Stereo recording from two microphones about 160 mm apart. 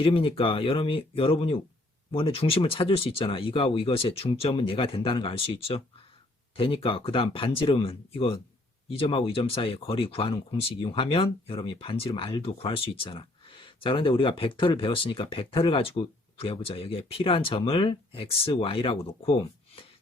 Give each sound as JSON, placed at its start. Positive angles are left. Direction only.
{"t": 0.0, "sound": "speech", "side_deg": 35}